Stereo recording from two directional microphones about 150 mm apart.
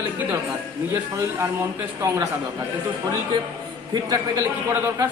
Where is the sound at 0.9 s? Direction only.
20° right (ahead or behind).